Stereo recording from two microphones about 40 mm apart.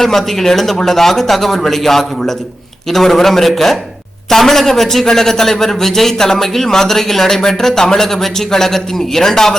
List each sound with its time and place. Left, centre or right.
0.0 s a man's voice: centre